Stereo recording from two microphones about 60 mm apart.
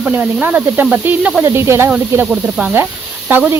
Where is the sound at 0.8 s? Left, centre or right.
Right.